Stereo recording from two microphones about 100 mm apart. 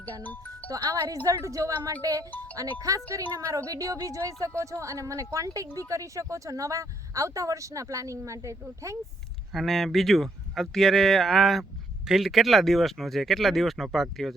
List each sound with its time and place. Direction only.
0.2 s speech: 15° left (ahead or behind)
0.7 s speech: 35° right (ahead or behind)
9.5 s speech: centre (ahead or behind)